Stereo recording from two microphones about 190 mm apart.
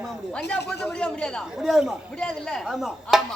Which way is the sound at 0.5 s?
5° left (ahead or behind).